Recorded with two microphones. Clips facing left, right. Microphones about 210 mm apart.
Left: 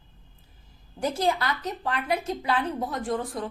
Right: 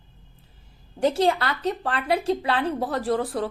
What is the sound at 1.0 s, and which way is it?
A woman's voice, 30° right (ahead or behind).